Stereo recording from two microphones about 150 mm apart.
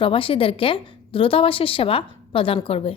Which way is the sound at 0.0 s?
35° left (ahead or behind).